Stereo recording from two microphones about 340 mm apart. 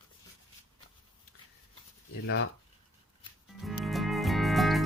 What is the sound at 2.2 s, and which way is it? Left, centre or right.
Speech, left.